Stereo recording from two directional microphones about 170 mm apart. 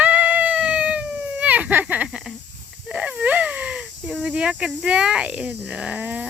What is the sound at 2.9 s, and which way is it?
Speech, 5° right (ahead or behind).